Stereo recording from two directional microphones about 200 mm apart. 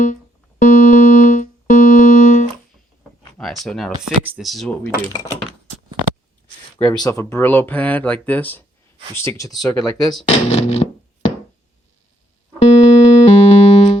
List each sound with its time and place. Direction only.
0.6 s music: 40° left (ahead or behind)
3.3 s speech: centre (ahead or behind)
6.7 s speech: 25° left (ahead or behind)
10.2 s music: 30° left (ahead or behind)
12.5 s music: 30° left (ahead or behind)